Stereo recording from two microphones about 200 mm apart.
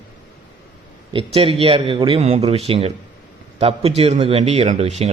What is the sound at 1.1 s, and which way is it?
A man's voice, 25° right (ahead or behind).